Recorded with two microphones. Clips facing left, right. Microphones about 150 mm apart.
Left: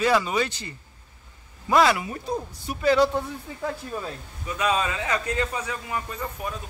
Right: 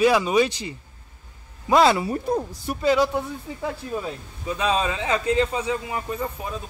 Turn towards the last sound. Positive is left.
turn(degrees=-20)  # may be behind; listen again after turning